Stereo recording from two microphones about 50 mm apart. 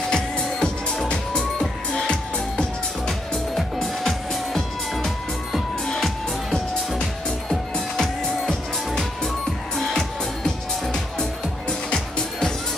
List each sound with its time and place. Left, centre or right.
0.1 s music: centre
3.1 s music: centre